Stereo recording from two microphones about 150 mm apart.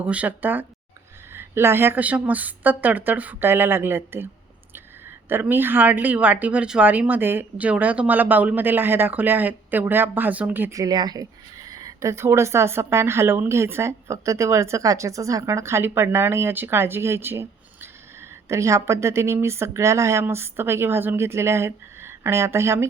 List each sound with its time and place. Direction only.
0.0 s a woman's voice: 10° right (ahead or behind)
5.3 s a woman's voice: 15° right (ahead or behind)